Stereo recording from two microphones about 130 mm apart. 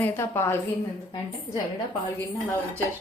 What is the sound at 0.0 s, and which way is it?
Speech, 20° left (ahead or behind).